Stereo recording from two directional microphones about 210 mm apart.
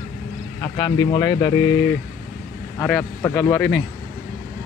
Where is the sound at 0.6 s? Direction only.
20° left (ahead or behind).